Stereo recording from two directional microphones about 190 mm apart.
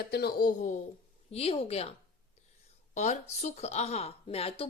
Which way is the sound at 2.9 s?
35° left (ahead or behind).